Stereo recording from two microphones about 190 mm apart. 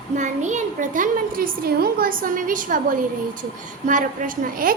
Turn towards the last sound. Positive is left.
turn(degrees=-45)  # may be behind; listen again after turning